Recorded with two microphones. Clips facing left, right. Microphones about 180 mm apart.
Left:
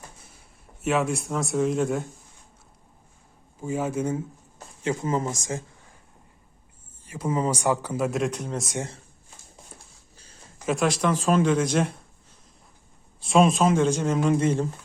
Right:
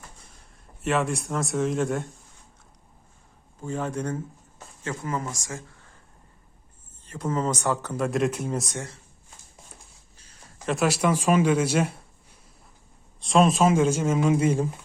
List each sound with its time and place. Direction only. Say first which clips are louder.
0.3 s a man's voice: left 1 dB; centre (ahead or behind)
3.6 s speech: left 3 dB; 10° left (ahead or behind)
4.8 s speech: left 5 dB; 20° left (ahead or behind)
7.0 s speech: left 1 dB; 10° left (ahead or behind); by 8.6 s 5° right (ahead or behind)
10.7 s speech: even; 5° right (ahead or behind)
13.1 s speech: even; centre (ahead or behind)